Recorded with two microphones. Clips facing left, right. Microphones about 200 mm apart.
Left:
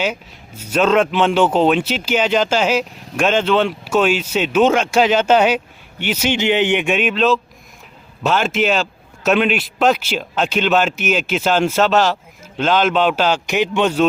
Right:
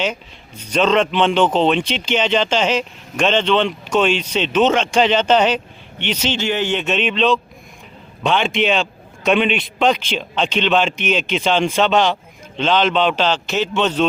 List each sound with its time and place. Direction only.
0.0 s a man's voice: 10° left (ahead or behind)